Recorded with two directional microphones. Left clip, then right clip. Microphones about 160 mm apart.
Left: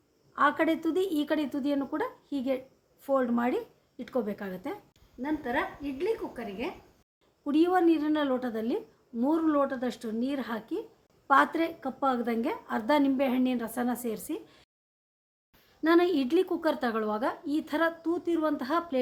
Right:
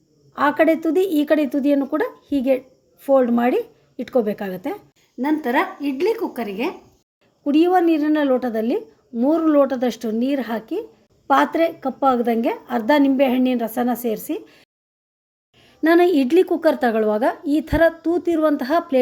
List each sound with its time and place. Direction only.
0.3 s a woman's voice: 15° right (ahead or behind)
5.2 s a woman's voice: 50° right (ahead or behind)
7.4 s a woman's voice: 10° right (ahead or behind)
15.8 s a woman's voice: 15° right (ahead or behind)